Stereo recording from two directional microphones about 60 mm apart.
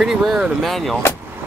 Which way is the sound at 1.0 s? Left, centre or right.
Left.